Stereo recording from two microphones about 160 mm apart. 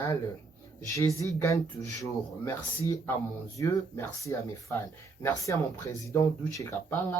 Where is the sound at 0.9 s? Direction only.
20° left (ahead or behind).